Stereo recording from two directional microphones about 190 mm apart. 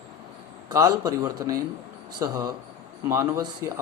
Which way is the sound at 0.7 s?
20° right (ahead or behind).